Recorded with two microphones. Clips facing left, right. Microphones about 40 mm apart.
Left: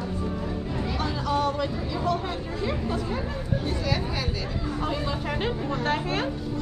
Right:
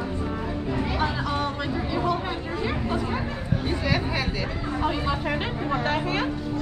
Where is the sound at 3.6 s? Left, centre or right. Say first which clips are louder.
Right 4 dB; right.